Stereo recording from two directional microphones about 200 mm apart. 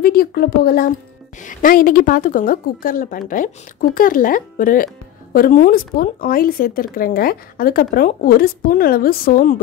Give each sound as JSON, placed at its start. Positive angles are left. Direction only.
{"t": 0.0, "sound": "a woman's voice", "side_deg": 50}